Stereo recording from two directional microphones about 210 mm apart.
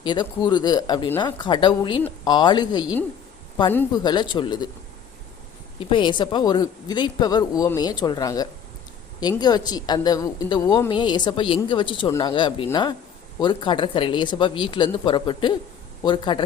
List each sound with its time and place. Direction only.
0.0 s a woman's voice: 20° left (ahead or behind)
5.8 s a woman's voice: 25° left (ahead or behind)